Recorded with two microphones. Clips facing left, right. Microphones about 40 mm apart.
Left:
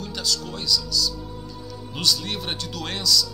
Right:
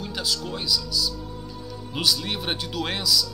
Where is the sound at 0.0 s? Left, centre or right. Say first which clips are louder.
Even; centre.